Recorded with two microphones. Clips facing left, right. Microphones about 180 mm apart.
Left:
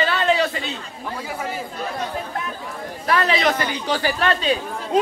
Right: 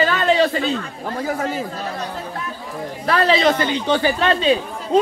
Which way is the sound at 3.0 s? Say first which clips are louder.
Right 3 dB; 30° right (ahead or behind).